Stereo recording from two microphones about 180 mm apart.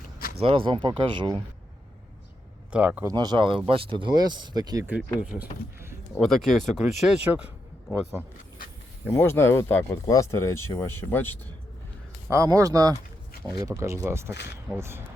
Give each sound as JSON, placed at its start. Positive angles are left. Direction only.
{"t": 0.3, "sound": "speech", "side_deg": -30}
{"t": 2.7, "sound": "speech", "side_deg": -5}
{"t": 3.1, "sound": "speech", "side_deg": -25}
{"t": 5.2, "sound": "speech", "side_deg": -10}
{"t": 9.0, "sound": "speech", "side_deg": 10}
{"t": 12.3, "sound": "speech", "side_deg": -15}
{"t": 14.3, "sound": "speech", "side_deg": 70}
{"t": 14.7, "sound": "speech", "side_deg": -15}